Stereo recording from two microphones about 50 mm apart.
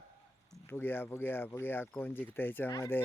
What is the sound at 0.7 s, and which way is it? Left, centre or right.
Speech, left.